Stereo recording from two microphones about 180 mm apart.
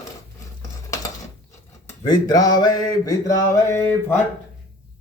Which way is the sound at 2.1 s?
20° left (ahead or behind).